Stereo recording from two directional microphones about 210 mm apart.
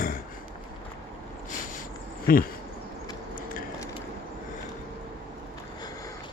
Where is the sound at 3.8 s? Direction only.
15° left (ahead or behind).